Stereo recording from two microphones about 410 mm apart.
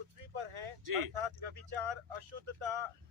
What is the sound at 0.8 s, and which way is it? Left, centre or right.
Speech, right.